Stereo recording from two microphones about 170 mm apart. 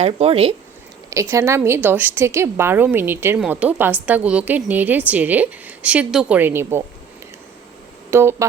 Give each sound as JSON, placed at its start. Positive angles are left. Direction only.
{"t": 0.0, "sound": "speech", "side_deg": -35}
{"t": 1.1, "sound": "a woman's voice", "side_deg": -20}
{"t": 8.1, "sound": "a woman's voice", "side_deg": -15}